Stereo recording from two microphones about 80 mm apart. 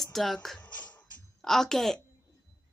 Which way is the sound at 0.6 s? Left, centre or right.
Centre.